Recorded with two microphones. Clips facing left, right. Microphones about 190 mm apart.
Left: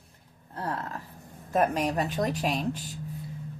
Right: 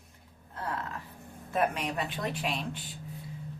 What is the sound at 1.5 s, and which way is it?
Speech, 40° left (ahead or behind).